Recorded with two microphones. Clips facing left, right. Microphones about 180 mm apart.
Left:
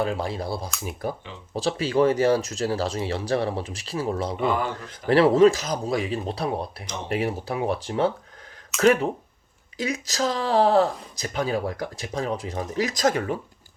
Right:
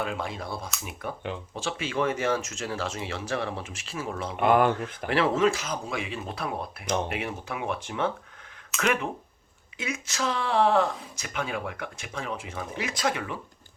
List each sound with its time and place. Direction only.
0.0 s speech: 35° left (ahead or behind)
4.4 s speech: 60° right (ahead or behind)
5.0 s speech: 35° left (ahead or behind)